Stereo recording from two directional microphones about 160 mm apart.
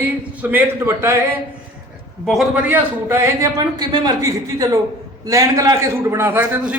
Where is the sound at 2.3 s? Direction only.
Centre (ahead or behind).